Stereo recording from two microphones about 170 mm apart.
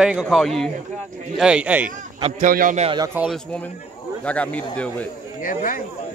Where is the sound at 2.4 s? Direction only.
55° right (ahead or behind).